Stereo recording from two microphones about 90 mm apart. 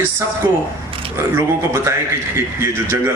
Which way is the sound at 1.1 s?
30° right (ahead or behind).